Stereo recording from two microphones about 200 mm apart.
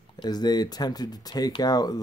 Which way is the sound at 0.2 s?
20° left (ahead or behind).